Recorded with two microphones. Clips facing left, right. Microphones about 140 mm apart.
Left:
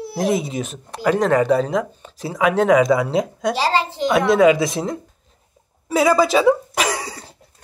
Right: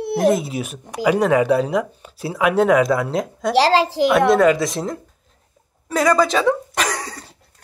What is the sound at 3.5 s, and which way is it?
Speech, 85° right.